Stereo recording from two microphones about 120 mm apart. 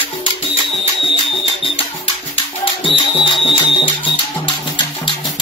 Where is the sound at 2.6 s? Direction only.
45° left (ahead or behind).